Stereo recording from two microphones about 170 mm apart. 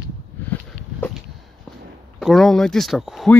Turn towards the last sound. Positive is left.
turn(degrees=0)  # may be behind; listen again after turning